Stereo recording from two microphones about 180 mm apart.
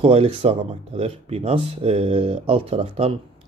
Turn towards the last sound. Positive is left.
turn(degrees=-35)  # may be behind; listen again after turning